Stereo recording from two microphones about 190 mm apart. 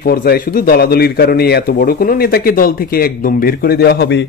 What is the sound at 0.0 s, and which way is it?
Speech, 55° left (ahead or behind).